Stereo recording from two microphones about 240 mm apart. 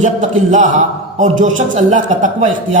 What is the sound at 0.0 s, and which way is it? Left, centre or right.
A man's voice, right.